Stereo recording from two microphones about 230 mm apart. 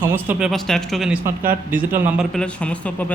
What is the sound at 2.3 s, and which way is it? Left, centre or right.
Speech, centre.